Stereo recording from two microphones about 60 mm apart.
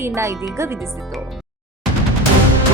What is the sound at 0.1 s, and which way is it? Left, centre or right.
Speech, right.